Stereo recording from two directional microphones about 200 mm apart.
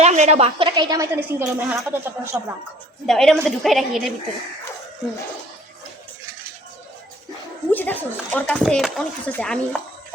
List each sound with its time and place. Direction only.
0.0 s a woman's voice: 35° right (ahead or behind); by 2.4 s 10° right (ahead or behind)
3.1 s a woman's voice: centre (ahead or behind)
7.7 s speech: 10° left (ahead or behind)